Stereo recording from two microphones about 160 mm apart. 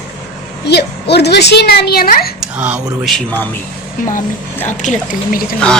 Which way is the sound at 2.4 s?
5° right (ahead or behind).